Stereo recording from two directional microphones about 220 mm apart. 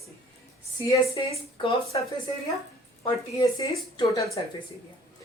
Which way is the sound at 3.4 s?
15° left (ahead or behind).